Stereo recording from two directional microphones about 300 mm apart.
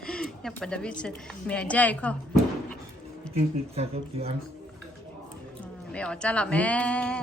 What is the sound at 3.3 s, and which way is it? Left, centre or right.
Speech, right.